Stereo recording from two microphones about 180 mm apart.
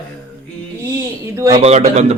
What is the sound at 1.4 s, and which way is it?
Speech, 20° right (ahead or behind).